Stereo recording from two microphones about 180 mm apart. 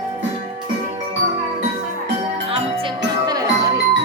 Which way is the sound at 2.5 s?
30° right (ahead or behind).